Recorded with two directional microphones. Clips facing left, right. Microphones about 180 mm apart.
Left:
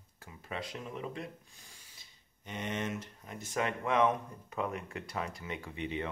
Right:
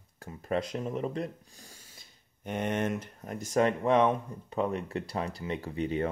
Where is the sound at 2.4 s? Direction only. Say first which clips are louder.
Right 7 dB; 55° right (ahead or behind).